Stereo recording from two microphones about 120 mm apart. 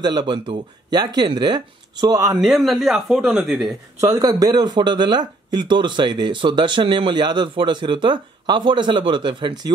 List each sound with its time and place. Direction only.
0.0 s speech: 40° right (ahead or behind)
2.4 s speech: centre (ahead or behind)
4.0 s speech: 30° right (ahead or behind)